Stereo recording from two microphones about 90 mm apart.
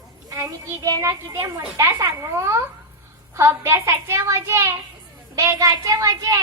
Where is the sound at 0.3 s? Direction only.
35° right (ahead or behind).